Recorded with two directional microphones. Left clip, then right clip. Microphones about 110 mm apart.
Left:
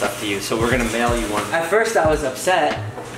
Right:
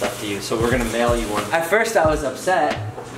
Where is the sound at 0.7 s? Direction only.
5° left (ahead or behind).